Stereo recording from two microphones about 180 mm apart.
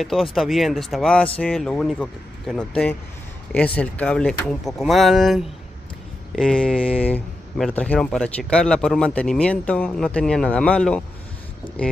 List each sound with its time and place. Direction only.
0.0 s speech: centre (ahead or behind)